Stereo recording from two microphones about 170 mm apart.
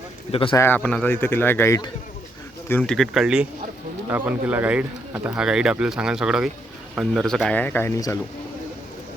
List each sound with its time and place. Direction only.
0.3 s a man's voice: 30° left (ahead or behind)
0.5 s speech: 15° left (ahead or behind)